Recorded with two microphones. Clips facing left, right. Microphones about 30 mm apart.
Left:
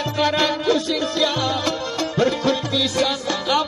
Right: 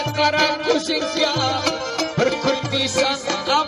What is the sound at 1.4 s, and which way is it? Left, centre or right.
Music, centre.